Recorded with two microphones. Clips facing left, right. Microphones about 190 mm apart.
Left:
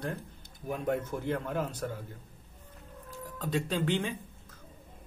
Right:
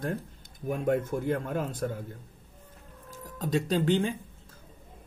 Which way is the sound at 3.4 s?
40° right (ahead or behind).